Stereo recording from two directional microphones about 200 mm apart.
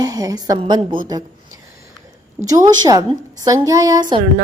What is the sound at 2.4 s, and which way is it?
A woman's voice, 20° right (ahead or behind).